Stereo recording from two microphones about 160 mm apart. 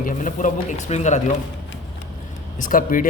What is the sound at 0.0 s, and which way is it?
Speech, 55° left (ahead or behind).